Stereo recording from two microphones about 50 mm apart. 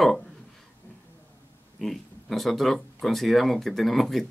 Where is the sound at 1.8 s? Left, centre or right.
Centre.